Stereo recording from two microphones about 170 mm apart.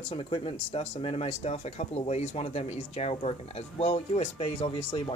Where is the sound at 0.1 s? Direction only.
35° left (ahead or behind).